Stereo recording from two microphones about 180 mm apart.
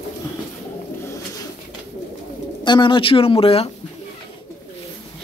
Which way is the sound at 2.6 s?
25° left (ahead or behind).